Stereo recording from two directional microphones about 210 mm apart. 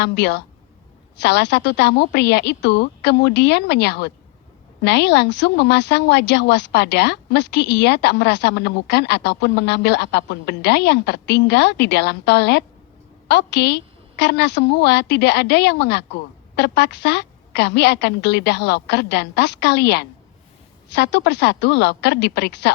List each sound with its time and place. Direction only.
0.0 s a woman's voice: 55° left (ahead or behind)